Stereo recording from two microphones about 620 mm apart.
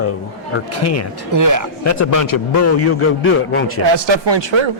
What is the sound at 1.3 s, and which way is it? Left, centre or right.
Speech, right.